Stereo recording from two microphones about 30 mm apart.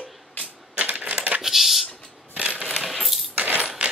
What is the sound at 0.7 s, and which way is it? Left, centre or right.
Typewriter, right.